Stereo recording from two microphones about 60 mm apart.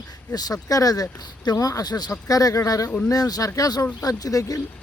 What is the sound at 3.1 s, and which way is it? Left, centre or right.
Speech, left.